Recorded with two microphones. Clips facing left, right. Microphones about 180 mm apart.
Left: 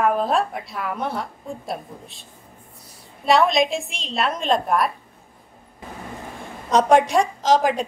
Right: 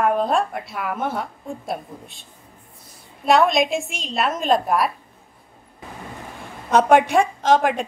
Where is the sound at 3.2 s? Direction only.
Centre (ahead or behind).